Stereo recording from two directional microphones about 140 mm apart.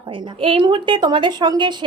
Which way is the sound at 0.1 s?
40° right (ahead or behind).